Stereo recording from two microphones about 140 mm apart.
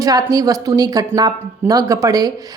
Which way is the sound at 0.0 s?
25° right (ahead or behind).